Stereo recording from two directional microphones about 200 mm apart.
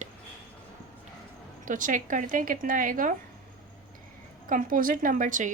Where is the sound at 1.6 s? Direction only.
40° right (ahead or behind).